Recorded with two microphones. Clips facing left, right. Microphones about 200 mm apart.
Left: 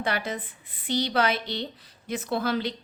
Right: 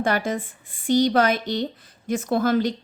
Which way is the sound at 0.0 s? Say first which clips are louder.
Right 6 dB; 45° right (ahead or behind).